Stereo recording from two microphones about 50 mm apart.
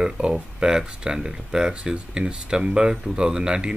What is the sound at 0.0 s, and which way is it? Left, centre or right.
Speech, centre.